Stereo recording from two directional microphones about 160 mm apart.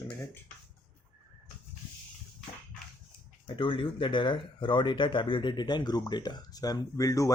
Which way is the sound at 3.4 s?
35° left (ahead or behind).